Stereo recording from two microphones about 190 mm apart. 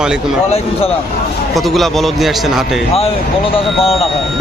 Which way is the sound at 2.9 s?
30° left (ahead or behind).